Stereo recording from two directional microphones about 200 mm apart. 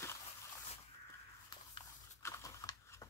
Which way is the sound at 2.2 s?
15° left (ahead or behind).